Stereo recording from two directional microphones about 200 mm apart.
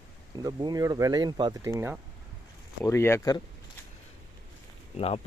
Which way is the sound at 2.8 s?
15° left (ahead or behind).